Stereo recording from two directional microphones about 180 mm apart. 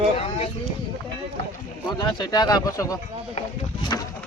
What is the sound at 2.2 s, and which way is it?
Speech, 20° left (ahead or behind).